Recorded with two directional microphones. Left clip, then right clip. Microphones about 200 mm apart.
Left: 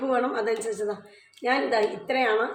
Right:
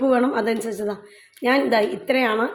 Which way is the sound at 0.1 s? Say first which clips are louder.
Right 5 dB; 50° right (ahead or behind).